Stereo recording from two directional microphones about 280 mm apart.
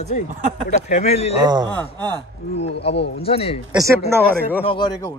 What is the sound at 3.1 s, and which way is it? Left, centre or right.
Speech, left.